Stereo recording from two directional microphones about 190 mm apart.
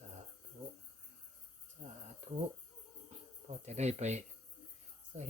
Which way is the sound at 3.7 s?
35° right (ahead or behind).